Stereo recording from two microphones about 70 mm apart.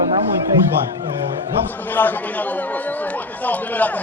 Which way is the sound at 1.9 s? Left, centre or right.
Left.